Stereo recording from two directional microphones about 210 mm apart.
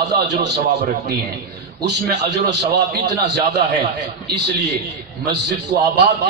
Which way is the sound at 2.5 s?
55° right (ahead or behind).